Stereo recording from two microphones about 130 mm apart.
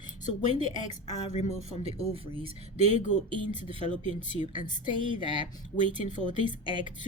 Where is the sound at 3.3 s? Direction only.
45° right (ahead or behind).